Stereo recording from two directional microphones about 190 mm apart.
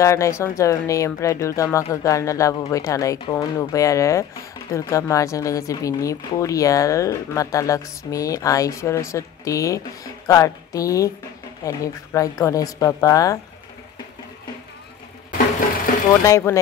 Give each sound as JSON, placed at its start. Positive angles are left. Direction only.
{"t": 0.0, "sound": "speech", "side_deg": 15}
{"t": 16.3, "sound": "speech", "side_deg": 15}